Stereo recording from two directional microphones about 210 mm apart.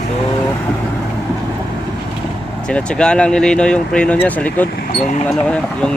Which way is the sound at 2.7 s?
5° left (ahead or behind).